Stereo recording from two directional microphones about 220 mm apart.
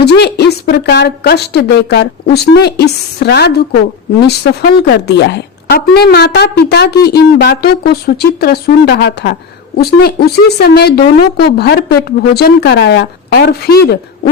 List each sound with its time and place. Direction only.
0.0 s speech: 50° left (ahead or behind)